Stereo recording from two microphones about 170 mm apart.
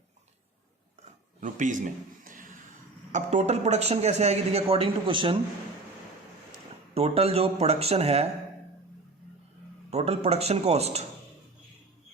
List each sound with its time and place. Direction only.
1.4 s a sound: 45° right (ahead or behind)
3.1 s a man's voice: 45° right (ahead or behind)
6.9 s a man's voice: 35° right (ahead or behind)
9.9 s a man's voice: 40° right (ahead or behind)